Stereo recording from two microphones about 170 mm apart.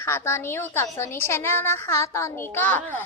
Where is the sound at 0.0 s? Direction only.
15° left (ahead or behind).